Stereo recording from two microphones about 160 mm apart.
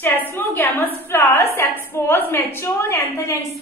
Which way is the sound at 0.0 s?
15° left (ahead or behind).